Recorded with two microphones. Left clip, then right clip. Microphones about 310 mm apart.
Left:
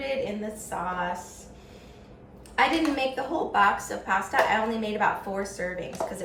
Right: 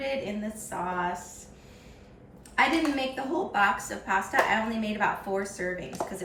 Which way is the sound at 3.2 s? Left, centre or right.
Centre.